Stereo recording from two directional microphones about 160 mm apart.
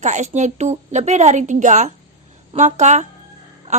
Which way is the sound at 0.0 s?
45° right (ahead or behind).